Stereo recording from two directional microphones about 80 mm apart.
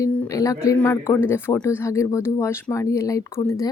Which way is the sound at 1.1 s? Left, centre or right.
Left.